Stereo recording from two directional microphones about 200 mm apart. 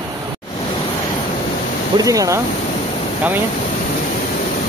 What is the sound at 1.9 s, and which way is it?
Speech, 15° right (ahead or behind).